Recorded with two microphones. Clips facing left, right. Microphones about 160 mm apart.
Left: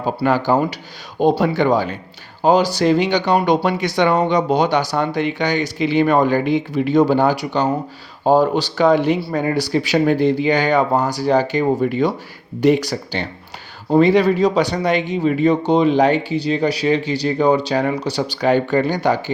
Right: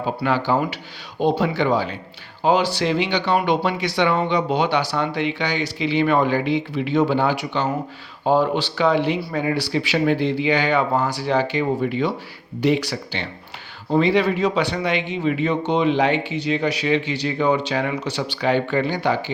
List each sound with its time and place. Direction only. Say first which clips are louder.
0.0 s speech: left 4 dB; 45° left (ahead or behind)